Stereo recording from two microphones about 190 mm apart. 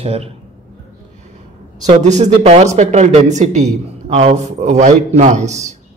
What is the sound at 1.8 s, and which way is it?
Speech, 40° right (ahead or behind).